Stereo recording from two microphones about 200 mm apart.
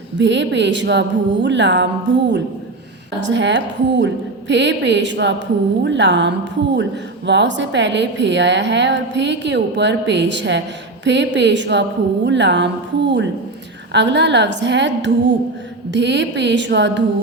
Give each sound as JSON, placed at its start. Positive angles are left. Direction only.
{"t": 0.2, "sound": "a woman's voice", "side_deg": -65}
{"t": 3.2, "sound": "a woman's voice", "side_deg": -65}